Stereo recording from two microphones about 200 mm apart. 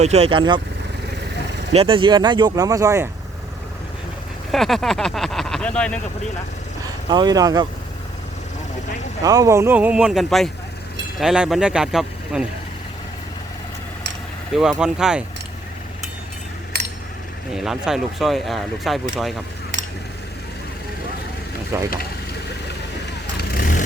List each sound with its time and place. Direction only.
0.0 s speech: 30° right (ahead or behind)
1.7 s speech: 30° right (ahead or behind)
4.5 s speech: centre (ahead or behind)
6.8 s speech: 20° right (ahead or behind)
9.2 s speech: 20° right (ahead or behind); by 12.5 s 5° right (ahead or behind)
14.5 s speech: centre (ahead or behind)
17.5 s speech: centre (ahead or behind)
21.7 s speech: 15° right (ahead or behind)
23.4 s vehicle: 50° left (ahead or behind)